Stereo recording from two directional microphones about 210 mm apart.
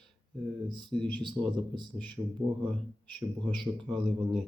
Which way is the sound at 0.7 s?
20° right (ahead or behind).